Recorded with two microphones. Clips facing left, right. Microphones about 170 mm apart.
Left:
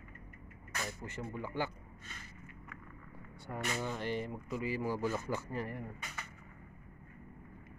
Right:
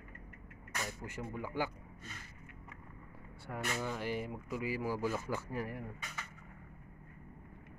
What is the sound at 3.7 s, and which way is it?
Speech, 5° right (ahead or behind).